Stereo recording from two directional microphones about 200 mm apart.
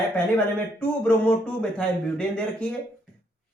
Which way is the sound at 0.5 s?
5° left (ahead or behind).